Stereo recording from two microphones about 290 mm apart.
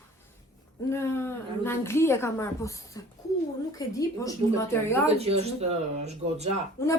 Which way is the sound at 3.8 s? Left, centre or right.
Centre.